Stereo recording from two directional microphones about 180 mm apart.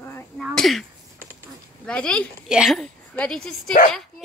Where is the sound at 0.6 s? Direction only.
Centre (ahead or behind).